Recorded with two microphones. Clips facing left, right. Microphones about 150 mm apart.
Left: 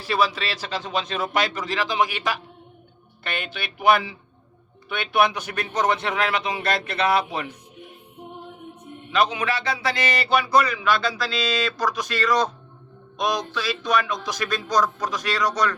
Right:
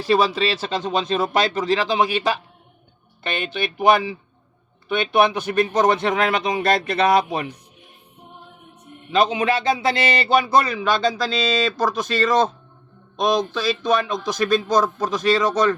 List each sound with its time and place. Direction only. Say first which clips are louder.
0.1 s a man's voice: right 5 dB; 30° right (ahead or behind)
4.9 s a man's voice: right 4 dB; 20° right (ahead or behind)
9.1 s a man's voice: right 4 dB; 25° right (ahead or behind)